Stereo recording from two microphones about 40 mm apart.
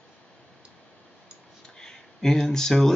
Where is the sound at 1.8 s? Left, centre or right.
Centre.